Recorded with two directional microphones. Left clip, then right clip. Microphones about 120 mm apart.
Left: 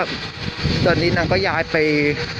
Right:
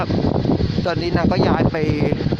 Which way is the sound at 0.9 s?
45° right (ahead or behind).